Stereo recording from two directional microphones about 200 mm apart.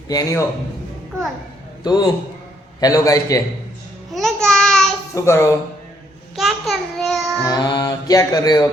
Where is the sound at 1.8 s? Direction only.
20° left (ahead or behind).